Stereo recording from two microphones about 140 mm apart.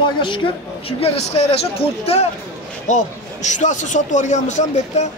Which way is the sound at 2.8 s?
60° left (ahead or behind).